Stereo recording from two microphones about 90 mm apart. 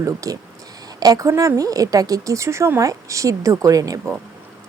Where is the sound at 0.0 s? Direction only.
40° right (ahead or behind).